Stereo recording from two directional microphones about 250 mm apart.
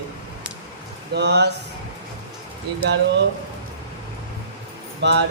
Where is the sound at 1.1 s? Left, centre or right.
Right.